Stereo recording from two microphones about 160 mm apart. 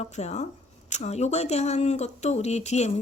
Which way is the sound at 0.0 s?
45° left (ahead or behind).